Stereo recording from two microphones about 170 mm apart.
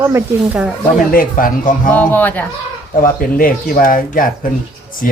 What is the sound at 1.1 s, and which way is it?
Speech, 55° left (ahead or behind).